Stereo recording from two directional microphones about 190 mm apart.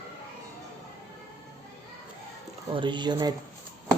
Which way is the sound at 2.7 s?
25° right (ahead or behind).